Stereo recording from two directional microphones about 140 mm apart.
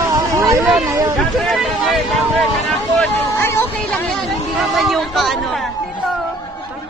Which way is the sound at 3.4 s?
15° left (ahead or behind).